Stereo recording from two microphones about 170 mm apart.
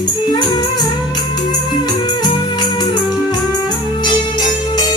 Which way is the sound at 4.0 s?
25° left (ahead or behind).